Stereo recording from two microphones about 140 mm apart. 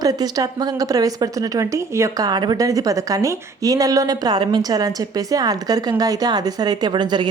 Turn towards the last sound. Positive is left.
turn(degrees=-30)  # may be behind; listen again after turning